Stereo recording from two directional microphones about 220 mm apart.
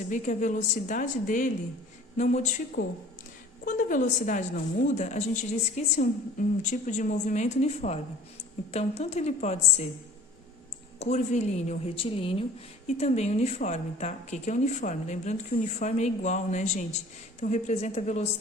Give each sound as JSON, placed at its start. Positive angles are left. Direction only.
{"t": 0.1, "sound": "speech", "side_deg": 35}
{"t": 2.8, "sound": "speech", "side_deg": 50}
{"t": 3.7, "sound": "a woman's voice", "side_deg": 35}
{"t": 11.0, "sound": "a woman's voice", "side_deg": 30}